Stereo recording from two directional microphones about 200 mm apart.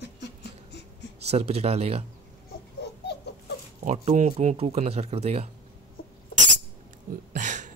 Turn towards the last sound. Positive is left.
turn(degrees=-35)  # may be behind; listen again after turning